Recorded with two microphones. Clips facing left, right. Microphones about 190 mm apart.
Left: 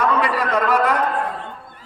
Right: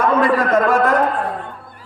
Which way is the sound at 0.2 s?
45° right (ahead or behind).